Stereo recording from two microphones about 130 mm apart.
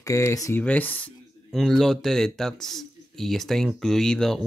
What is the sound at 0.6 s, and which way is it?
Speech, 10° left (ahead or behind).